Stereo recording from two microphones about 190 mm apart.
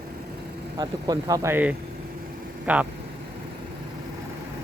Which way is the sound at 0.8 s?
20° right (ahead or behind).